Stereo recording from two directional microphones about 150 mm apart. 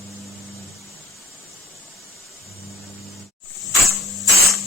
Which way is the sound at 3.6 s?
Centre (ahead or behind).